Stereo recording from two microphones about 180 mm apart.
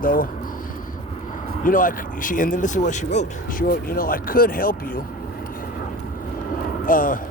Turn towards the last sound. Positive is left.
turn(degrees=50)  # may be behind; listen again after turning